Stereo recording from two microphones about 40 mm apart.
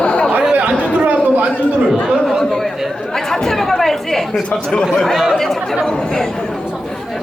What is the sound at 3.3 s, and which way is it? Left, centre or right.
Chatter, centre.